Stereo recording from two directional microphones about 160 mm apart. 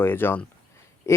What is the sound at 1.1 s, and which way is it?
Pig, 20° left (ahead or behind).